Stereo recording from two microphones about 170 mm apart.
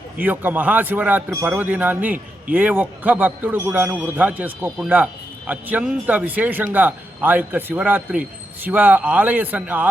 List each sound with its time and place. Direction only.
0.2 s a man's voice: 10° right (ahead or behind)